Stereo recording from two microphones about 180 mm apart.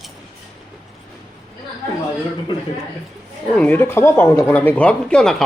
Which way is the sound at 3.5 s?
5° left (ahead or behind).